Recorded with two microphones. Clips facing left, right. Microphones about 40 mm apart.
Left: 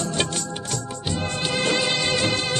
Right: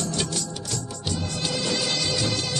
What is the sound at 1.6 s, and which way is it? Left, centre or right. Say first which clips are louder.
Music: left 5 dB; left.